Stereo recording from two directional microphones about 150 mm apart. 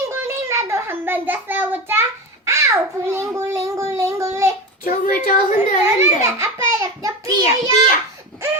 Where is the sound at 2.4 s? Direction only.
20° right (ahead or behind).